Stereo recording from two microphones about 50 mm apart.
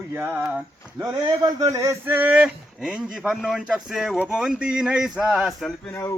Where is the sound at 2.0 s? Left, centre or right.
Right.